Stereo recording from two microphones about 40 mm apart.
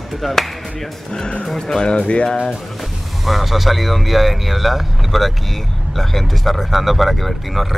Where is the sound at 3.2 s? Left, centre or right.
Centre.